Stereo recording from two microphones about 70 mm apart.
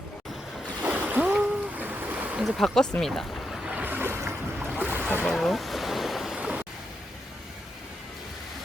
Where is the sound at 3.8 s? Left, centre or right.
Right.